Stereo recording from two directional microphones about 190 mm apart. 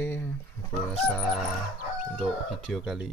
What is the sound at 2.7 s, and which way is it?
Speech, centre (ahead or behind).